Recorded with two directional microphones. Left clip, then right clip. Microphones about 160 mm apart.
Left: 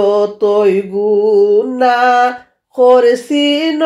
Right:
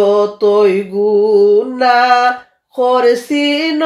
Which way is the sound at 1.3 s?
35° left (ahead or behind).